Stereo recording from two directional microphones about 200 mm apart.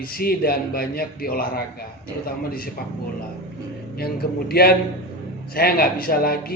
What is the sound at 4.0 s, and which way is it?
A man's voice, 50° left (ahead or behind).